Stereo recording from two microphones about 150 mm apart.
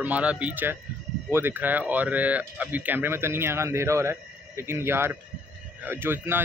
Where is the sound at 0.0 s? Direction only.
10° right (ahead or behind).